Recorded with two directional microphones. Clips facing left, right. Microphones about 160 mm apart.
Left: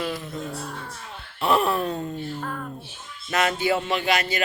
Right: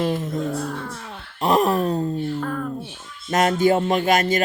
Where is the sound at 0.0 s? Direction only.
45° right (ahead or behind).